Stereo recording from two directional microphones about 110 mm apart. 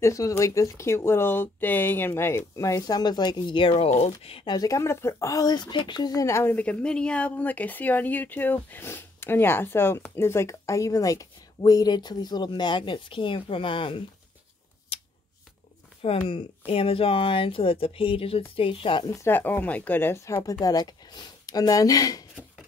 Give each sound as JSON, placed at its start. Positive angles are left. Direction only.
{"t": 0.0, "sound": "speech", "side_deg": 30}
{"t": 3.7, "sound": "speech", "side_deg": 75}
{"t": 4.5, "sound": "speech", "side_deg": 35}
{"t": 14.9, "sound": "shuffling cards", "side_deg": 60}
{"t": 16.0, "sound": "speech", "side_deg": 60}
{"t": 19.2, "sound": "speech", "side_deg": 20}
{"t": 20.6, "sound": "speech", "side_deg": 35}